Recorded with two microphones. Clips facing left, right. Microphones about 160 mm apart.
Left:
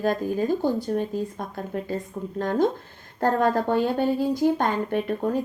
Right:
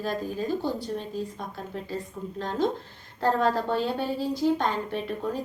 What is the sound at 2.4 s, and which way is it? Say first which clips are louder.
A woman's voice: left 5 dB; 50° left (ahead or behind).